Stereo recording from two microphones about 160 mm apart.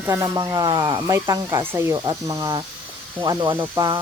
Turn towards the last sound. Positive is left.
turn(degrees=-20)  # may be behind; listen again after turning